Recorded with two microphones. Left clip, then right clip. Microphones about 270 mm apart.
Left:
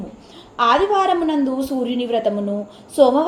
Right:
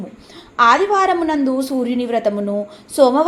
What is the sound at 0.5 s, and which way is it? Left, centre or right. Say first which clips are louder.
A woman's voice: right 3 dB; right.